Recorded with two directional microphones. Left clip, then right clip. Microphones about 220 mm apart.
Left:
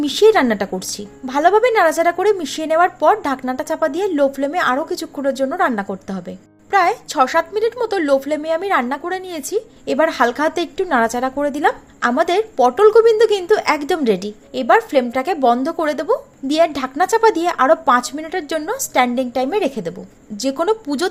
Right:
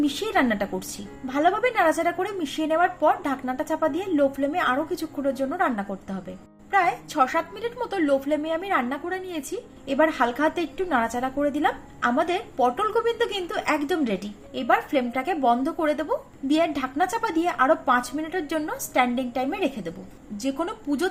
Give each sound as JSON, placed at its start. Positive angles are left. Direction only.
{"t": 0.0, "sound": "a woman's voice", "side_deg": 40}